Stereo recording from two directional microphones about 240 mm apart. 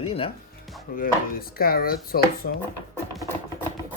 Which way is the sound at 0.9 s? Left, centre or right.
Left.